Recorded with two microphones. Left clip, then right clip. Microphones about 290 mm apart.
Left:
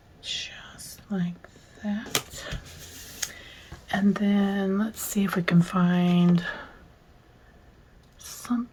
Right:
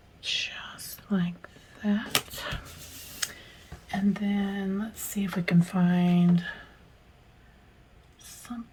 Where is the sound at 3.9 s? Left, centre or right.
Centre.